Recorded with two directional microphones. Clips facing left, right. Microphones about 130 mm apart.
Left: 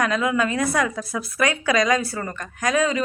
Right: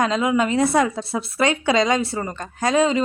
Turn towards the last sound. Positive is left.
turn(degrees=-25)  # may be behind; listen again after turning